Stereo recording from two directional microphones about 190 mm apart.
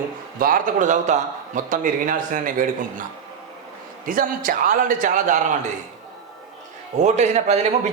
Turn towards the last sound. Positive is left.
turn(degrees=-35)  # may be behind; listen again after turning